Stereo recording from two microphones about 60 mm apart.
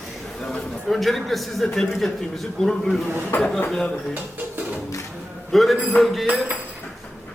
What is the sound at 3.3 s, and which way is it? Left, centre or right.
Speech, left.